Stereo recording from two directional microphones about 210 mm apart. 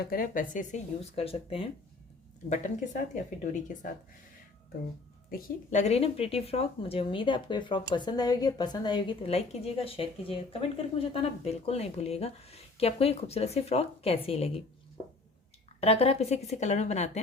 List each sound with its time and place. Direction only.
0.0 s speech: 45° left (ahead or behind); by 1.7 s 25° left (ahead or behind)
5.3 s speech: 40° left (ahead or behind)
5.9 s speech: 30° left (ahead or behind)
15.8 s speech: 30° left (ahead or behind)